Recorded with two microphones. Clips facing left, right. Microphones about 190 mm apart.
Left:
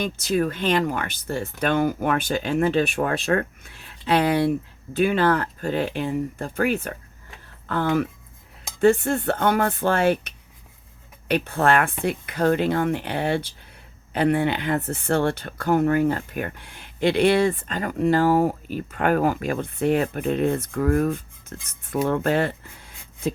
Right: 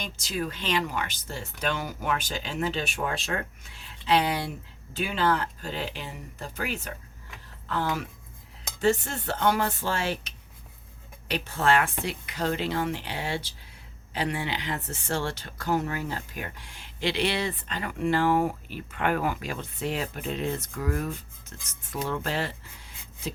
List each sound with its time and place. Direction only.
0.0 s speech: 55° left (ahead or behind)